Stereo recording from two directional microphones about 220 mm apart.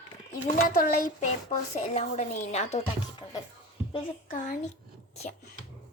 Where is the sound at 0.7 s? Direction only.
35° left (ahead or behind).